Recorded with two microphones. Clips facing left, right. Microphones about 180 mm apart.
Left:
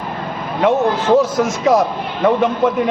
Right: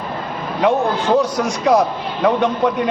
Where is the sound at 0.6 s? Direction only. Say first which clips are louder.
Left 2 dB; centre (ahead or behind).